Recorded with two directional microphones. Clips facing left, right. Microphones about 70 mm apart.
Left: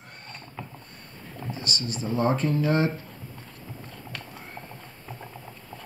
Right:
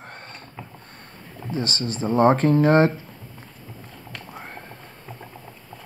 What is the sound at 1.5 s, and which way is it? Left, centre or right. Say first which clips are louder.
Speech: right 6 dB; right.